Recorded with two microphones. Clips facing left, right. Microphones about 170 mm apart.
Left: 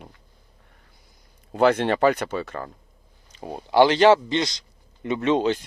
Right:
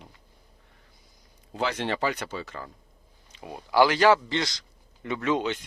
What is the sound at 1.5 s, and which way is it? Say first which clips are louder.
Speech: left 9 dB; 55° left (ahead or behind).